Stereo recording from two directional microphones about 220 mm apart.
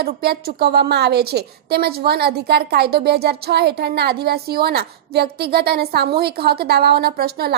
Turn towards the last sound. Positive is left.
turn(degrees=-45)  # may be behind; listen again after turning